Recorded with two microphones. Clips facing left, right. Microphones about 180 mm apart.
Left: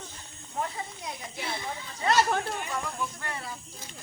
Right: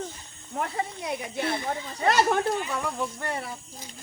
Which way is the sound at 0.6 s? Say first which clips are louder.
Right 4 dB; 65° right (ahead or behind).